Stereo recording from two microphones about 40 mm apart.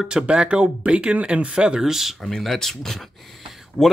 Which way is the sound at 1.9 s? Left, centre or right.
Centre.